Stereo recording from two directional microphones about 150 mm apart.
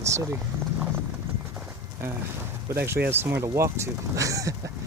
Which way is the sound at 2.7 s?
15° right (ahead or behind).